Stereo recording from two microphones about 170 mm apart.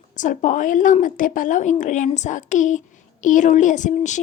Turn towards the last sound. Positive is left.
turn(degrees=45)  # may be behind; listen again after turning